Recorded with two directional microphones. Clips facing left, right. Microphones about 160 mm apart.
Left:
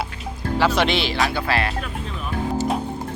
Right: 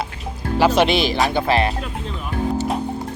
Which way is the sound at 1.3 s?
20° right (ahead or behind).